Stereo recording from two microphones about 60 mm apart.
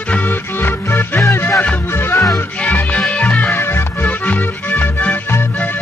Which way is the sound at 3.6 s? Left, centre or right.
Left.